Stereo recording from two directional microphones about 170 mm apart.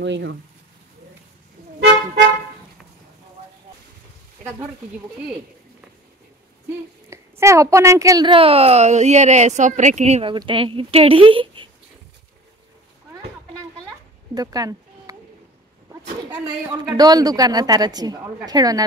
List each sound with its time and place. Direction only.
0.0 s speech: 90° right
7.1 s a woman's voice: 15° right (ahead or behind); by 10.3 s 40° right (ahead or behind)
10.3 s a woman's voice: 30° right (ahead or behind)
14.3 s a sound: 20° right (ahead or behind)
15.9 s speech: 10° right (ahead or behind)
16.8 s a woman's voice: 25° right (ahead or behind)